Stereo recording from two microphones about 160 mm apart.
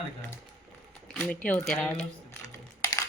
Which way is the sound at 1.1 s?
10° left (ahead or behind).